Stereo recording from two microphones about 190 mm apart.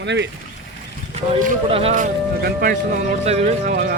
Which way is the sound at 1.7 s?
30° right (ahead or behind).